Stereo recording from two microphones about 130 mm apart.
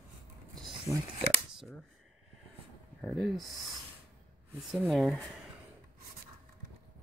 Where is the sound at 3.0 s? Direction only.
Centre (ahead or behind).